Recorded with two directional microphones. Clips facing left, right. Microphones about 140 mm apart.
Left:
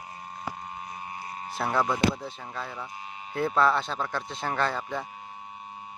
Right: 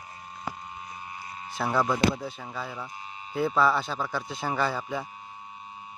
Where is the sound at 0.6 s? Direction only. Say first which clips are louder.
Left 2 dB; 35° left (ahead or behind).